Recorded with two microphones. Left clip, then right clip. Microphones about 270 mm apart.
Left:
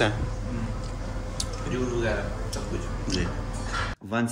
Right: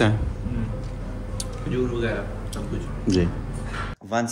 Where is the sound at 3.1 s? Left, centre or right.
Centre.